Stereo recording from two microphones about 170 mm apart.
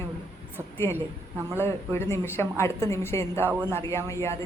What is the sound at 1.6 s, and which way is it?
A woman's voice, 15° left (ahead or behind).